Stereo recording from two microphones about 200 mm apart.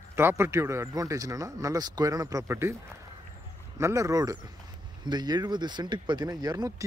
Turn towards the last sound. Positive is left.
turn(degrees=-20)  # may be behind; listen again after turning